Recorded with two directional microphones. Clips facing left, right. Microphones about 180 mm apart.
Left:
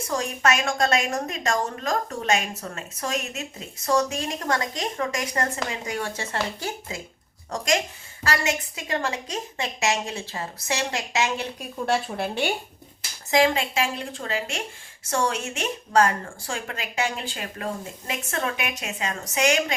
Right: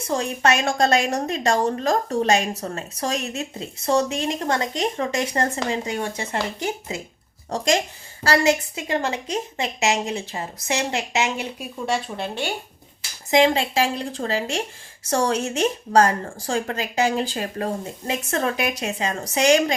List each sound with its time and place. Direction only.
0.1 s a woman's voice: 30° right (ahead or behind)
11.9 s speech: 5° left (ahead or behind)
13.3 s a woman's voice: 30° right (ahead or behind)